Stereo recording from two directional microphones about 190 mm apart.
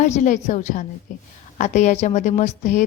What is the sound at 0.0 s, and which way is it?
A woman's voice, 40° left (ahead or behind).